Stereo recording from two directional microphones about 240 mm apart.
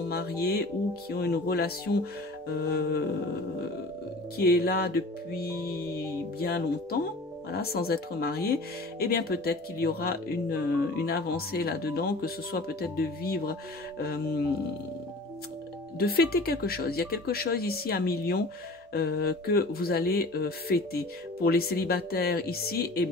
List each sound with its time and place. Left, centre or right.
0.1 s speech: left
4.4 s speech: left
16.0 s speech: left